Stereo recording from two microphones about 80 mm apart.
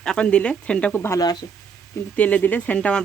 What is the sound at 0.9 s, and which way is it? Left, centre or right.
Speech, left.